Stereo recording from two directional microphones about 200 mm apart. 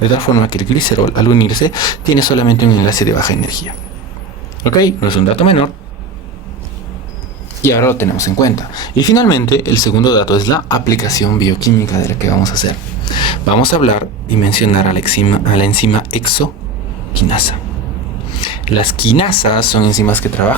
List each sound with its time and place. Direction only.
0.2 s speech: 20° left (ahead or behind)
7.6 s speech: 15° left (ahead or behind)